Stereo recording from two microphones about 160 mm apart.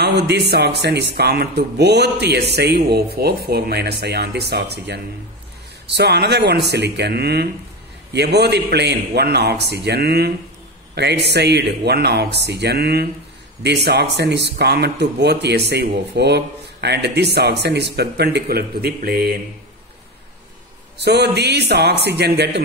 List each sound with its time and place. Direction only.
0.0 s speech: 90° right; by 19.3 s 75° right (ahead or behind)
21.0 s speech: 90° right